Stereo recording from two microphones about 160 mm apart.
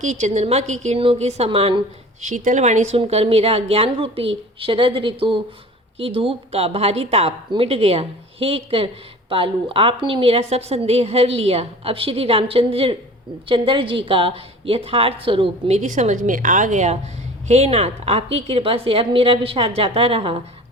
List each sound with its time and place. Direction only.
0.0 s a woman's voice: 45° right (ahead or behind)
2.2 s a woman's voice: 50° right (ahead or behind); by 20.4 s 35° right (ahead or behind)